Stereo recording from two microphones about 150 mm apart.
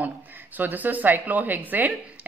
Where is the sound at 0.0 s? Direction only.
10° right (ahead or behind).